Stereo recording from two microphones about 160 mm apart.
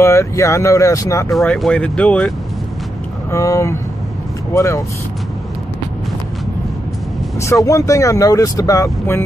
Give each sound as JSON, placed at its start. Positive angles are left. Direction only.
{"t": 0.0, "sound": "speech", "side_deg": 15}
{"t": 1.3, "sound": "speech", "side_deg": 5}
{"t": 3.3, "sound": "speech", "side_deg": 20}
{"t": 7.6, "sound": "speech", "side_deg": 20}